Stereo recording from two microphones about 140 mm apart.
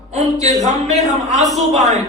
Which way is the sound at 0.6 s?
55° right (ahead or behind).